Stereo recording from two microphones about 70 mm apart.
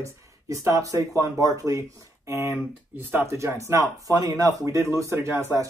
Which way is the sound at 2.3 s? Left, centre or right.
Right.